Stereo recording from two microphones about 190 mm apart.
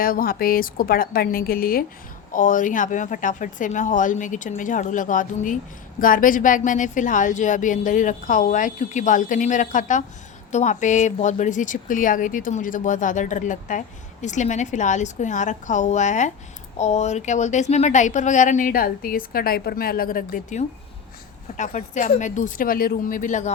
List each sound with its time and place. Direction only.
0.0 s a woman's voice: 50° left (ahead or behind)